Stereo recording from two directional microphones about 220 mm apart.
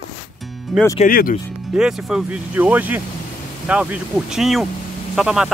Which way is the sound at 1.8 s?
Centre (ahead or behind).